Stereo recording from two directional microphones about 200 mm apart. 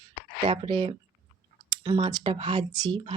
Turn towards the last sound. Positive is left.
turn(degrees=-25)  # may be behind; listen again after turning